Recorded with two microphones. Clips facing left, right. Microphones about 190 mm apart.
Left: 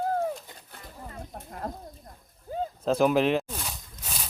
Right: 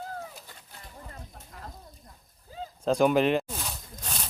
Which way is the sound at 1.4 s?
55° left (ahead or behind).